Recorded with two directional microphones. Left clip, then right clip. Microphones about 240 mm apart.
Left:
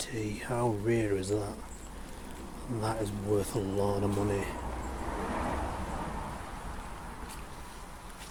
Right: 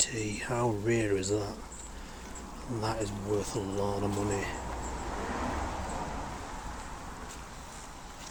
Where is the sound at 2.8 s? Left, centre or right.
Centre.